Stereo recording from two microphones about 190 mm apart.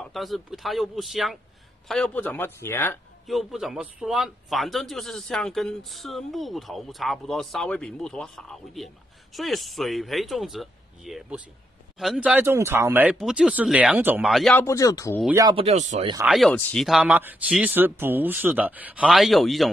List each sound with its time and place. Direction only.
0.0 s speech: centre (ahead or behind)
3.3 s speech: centre (ahead or behind)
14.6 s speech: 15° left (ahead or behind)
15.5 s speech: 35° right (ahead or behind)
16.3 s speech: centre (ahead or behind)